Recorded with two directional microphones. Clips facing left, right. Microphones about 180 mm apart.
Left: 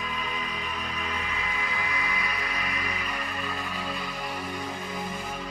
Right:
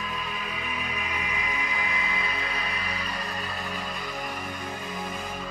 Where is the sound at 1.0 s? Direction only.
15° right (ahead or behind); by 3.2 s 30° right (ahead or behind).